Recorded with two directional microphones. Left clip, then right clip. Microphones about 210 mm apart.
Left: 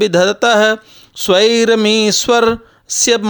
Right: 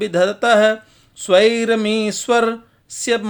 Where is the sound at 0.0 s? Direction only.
50° left (ahead or behind).